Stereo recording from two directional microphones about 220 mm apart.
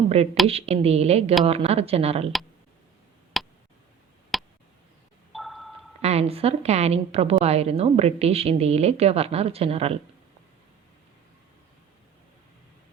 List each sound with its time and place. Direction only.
0.4 s a woman's voice: 25° right (ahead or behind)
3.3 s tick: centre (ahead or behind)
4.3 s a sound: centre (ahead or behind)
6.0 s a woman's voice: 30° right (ahead or behind)